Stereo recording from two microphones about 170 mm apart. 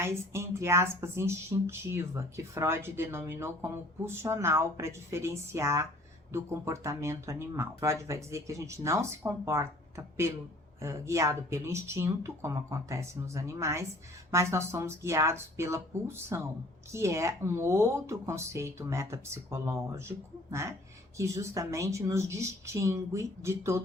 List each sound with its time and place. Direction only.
0.0 s speech: 15° right (ahead or behind)